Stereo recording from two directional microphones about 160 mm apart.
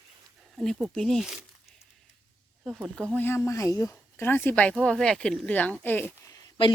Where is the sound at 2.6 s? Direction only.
5° right (ahead or behind).